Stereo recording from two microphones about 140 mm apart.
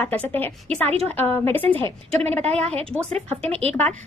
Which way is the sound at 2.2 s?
50° right (ahead or behind).